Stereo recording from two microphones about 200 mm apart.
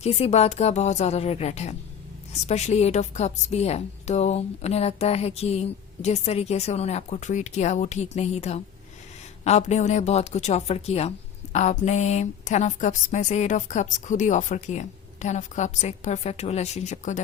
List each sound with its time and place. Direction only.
0.0 s a woman's voice: 30° left (ahead or behind)